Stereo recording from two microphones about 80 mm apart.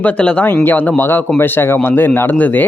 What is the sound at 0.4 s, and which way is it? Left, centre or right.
Speech, left.